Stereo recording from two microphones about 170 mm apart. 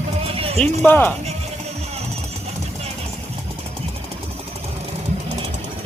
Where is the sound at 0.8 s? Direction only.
10° left (ahead or behind).